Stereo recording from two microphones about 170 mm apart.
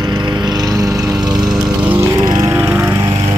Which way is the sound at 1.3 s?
5° right (ahead or behind).